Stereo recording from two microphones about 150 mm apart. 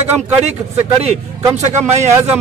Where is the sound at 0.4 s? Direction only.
45° right (ahead or behind).